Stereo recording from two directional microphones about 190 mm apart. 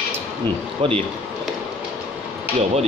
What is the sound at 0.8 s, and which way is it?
Speech, 25° right (ahead or behind).